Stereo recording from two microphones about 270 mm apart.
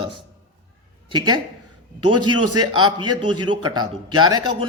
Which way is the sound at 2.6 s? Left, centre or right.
Centre.